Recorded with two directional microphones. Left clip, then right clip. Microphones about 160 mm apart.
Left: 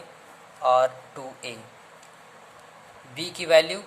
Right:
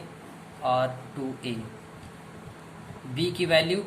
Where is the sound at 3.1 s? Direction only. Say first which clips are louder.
Left 4 dB; 50° left (ahead or behind).